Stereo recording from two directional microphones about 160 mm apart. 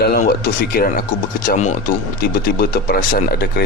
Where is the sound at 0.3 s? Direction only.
75° left (ahead or behind).